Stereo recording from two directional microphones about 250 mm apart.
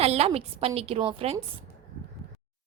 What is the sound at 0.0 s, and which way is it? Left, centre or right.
A woman's voice, right.